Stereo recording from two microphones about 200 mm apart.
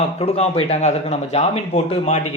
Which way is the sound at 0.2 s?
30° left (ahead or behind).